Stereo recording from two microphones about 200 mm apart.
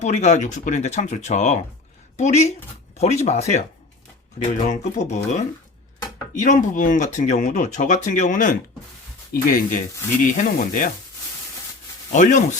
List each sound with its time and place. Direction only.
0.0 s speech: 35° left (ahead or behind)
12.1 s speech: 40° left (ahead or behind)